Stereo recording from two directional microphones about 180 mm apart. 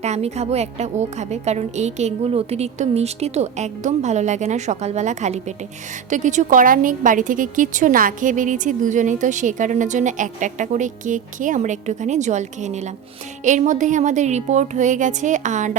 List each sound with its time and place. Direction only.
0.0 s a woman's voice: 40° right (ahead or behind)